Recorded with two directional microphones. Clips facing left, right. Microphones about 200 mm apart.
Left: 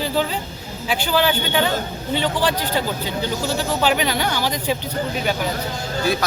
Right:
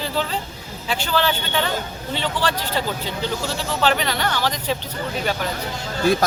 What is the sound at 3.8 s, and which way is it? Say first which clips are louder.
Speech: right 1 dB; 5° left (ahead or behind).